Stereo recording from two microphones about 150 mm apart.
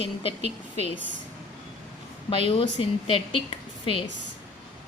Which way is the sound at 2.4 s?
40° left (ahead or behind).